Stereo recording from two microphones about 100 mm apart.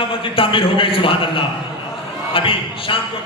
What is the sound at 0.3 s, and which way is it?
A man's voice, 60° left (ahead or behind).